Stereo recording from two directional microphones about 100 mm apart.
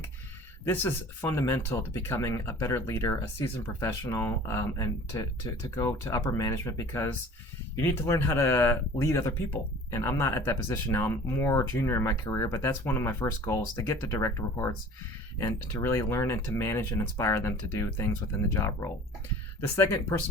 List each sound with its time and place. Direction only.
0.6 s speech: 25° left (ahead or behind)